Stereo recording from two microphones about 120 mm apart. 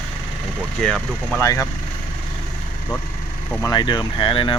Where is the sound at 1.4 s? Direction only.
25° left (ahead or behind).